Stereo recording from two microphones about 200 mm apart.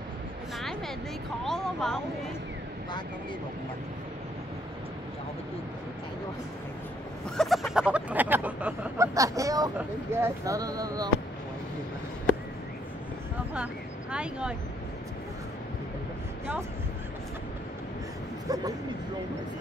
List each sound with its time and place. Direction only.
0.6 s a sound: centre (ahead or behind)
1.4 s speech: centre (ahead or behind)
7.3 s speech: centre (ahead or behind); by 11.1 s 20° right (ahead or behind)
14.1 s speech: 5° right (ahead or behind)
18.5 s speech: 20° right (ahead or behind)